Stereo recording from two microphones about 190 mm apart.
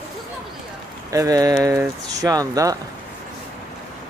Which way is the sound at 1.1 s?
20° right (ahead or behind).